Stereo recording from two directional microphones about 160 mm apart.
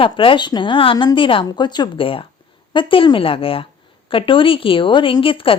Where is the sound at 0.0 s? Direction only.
35° left (ahead or behind).